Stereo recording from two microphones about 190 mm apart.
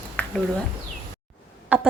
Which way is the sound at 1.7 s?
5° right (ahead or behind).